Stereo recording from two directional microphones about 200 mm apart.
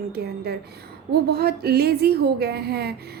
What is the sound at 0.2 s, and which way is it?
A woman's voice, 55° right (ahead or behind).